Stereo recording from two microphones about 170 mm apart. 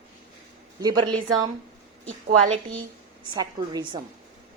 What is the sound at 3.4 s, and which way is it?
Speech, 25° right (ahead or behind).